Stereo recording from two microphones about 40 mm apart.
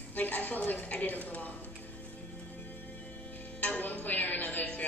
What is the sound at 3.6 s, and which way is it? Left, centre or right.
Music, left.